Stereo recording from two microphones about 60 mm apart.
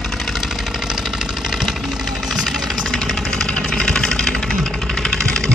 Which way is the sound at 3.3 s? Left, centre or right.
Centre.